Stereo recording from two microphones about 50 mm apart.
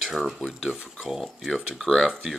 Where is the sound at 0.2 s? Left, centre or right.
Centre.